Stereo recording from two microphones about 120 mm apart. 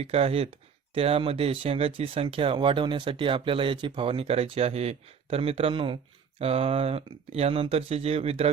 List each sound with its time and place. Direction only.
0.0 s speech: 55° right (ahead or behind)
6.4 s speech: 55° right (ahead or behind)